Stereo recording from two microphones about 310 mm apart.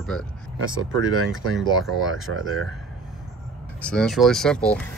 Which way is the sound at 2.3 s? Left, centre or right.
Right.